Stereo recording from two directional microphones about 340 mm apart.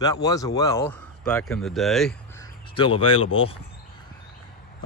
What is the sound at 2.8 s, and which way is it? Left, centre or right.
Speech, centre.